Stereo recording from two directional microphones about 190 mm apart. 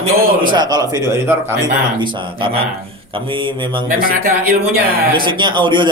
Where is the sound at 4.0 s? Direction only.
50° right (ahead or behind).